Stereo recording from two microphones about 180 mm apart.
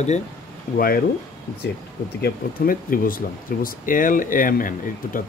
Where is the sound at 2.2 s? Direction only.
50° left (ahead or behind).